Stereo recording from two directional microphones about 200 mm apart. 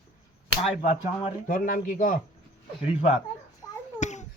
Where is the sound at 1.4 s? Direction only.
45° left (ahead or behind).